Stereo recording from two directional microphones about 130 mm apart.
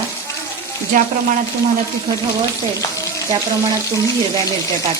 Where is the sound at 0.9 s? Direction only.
85° right.